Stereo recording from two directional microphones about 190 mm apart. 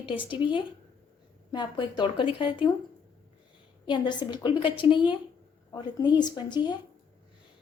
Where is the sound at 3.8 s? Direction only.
25° left (ahead or behind).